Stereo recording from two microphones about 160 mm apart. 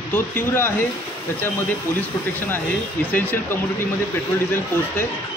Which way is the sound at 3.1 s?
15° left (ahead or behind).